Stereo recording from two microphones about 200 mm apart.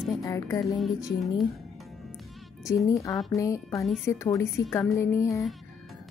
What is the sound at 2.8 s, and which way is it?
A woman's voice, 15° left (ahead or behind).